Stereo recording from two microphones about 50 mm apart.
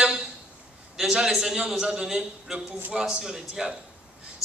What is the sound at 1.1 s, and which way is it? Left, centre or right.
A man's voice, centre.